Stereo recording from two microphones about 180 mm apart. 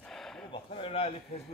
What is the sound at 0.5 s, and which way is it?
Speech, 30° left (ahead or behind).